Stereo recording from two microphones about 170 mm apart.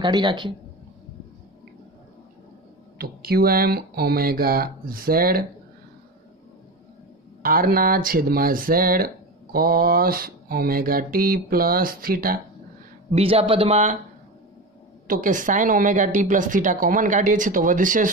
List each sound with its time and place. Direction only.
0.0 s a man's voice: 25° right (ahead or behind)
3.0 s speech: 65° right (ahead or behind)
7.4 s speech: 55° right (ahead or behind)
13.1 s speech: 35° right (ahead or behind)
15.0 s a woman's voice: 50° right (ahead or behind)